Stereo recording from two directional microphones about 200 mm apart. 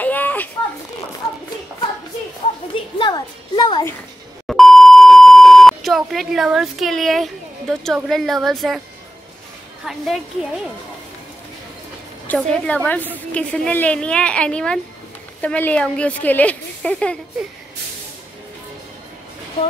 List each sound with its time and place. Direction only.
0.0 s a sound: 10° left (ahead or behind)
2.7 s music: 25° left (ahead or behind)
4.5 s beep: centre (ahead or behind)
9.8 s a woman's voice: centre (ahead or behind)
12.3 s a woman's voice: 5° left (ahead or behind)